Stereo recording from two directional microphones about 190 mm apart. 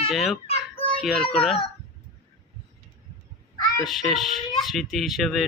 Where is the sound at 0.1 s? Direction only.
Centre (ahead or behind).